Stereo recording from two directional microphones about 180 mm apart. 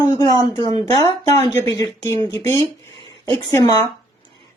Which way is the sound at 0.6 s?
30° right (ahead or behind).